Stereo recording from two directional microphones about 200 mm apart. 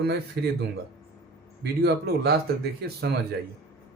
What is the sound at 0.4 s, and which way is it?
Speech, 55° right (ahead or behind).